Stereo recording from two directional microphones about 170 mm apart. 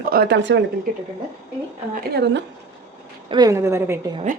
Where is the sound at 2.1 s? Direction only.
90° right.